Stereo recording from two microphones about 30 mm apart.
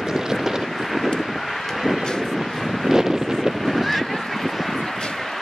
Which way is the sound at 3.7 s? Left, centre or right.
Centre.